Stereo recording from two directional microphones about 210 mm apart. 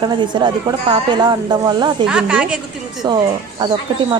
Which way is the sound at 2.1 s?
5° right (ahead or behind).